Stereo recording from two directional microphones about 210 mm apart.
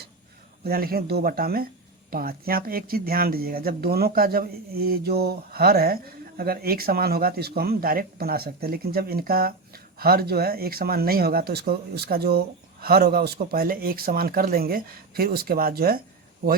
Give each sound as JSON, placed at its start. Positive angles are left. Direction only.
{"t": 0.6, "sound": "speech", "side_deg": -45}